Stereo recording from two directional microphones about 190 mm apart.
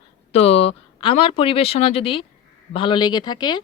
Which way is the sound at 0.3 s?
35° left (ahead or behind).